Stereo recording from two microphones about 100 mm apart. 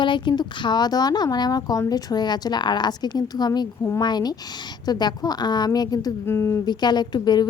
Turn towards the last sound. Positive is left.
turn(degrees=45)  # may be behind; listen again after turning